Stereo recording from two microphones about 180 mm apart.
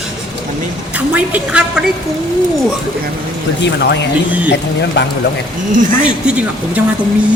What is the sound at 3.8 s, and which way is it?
Speech, 75° left (ahead or behind).